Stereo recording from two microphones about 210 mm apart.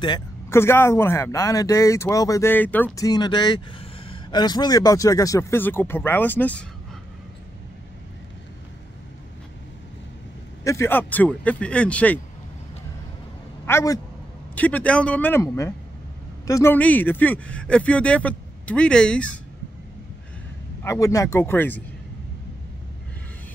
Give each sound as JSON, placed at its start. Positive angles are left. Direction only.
{"t": 0.0, "sound": "speech", "side_deg": 15}
{"t": 10.6, "sound": "speech", "side_deg": 15}
{"t": 13.7, "sound": "a man's voice", "side_deg": 15}
{"t": 20.8, "sound": "speech", "side_deg": 15}